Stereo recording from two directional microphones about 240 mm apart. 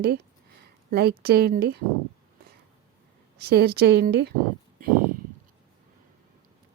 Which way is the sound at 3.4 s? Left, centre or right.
Right.